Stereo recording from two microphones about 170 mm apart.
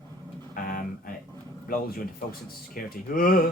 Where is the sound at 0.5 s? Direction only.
55° left (ahead or behind).